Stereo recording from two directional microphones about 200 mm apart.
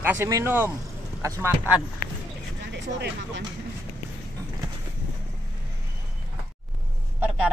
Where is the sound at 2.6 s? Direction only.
60° right (ahead or behind).